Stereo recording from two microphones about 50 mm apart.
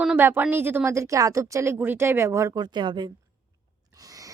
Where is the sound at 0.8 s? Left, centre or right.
Right.